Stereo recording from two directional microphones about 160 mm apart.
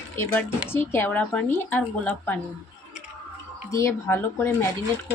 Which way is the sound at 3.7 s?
15° left (ahead or behind).